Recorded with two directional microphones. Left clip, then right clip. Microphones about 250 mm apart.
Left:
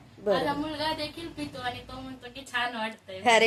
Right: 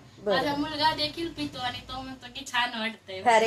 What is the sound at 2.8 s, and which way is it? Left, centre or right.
Speech, centre.